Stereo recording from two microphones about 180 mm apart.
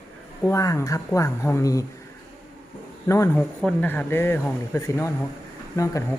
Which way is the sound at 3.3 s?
5° left (ahead or behind).